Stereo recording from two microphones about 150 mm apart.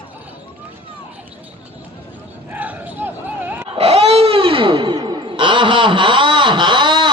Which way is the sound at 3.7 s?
45° right (ahead or behind).